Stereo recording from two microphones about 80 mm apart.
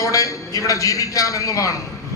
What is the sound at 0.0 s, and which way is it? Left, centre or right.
A man's voice, left.